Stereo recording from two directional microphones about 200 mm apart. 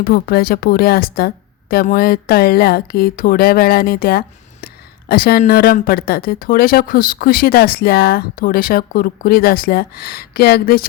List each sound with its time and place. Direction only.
0.0 s speech: 50° left (ahead or behind)